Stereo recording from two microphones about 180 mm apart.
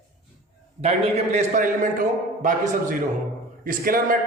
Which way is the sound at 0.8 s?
40° right (ahead or behind).